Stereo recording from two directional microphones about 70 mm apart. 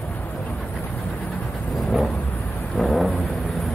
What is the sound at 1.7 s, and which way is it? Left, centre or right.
Vehicle, centre.